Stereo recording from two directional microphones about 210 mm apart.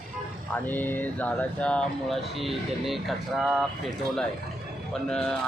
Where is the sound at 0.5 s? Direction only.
10° left (ahead or behind).